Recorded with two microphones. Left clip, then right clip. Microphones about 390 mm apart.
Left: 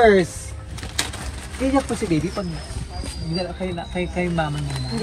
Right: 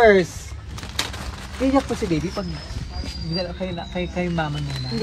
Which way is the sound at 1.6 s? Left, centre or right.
Centre.